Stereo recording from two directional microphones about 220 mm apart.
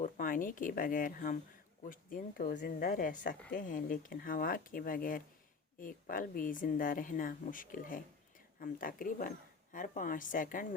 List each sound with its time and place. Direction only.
0.0 s a woman's voice: 40° left (ahead or behind)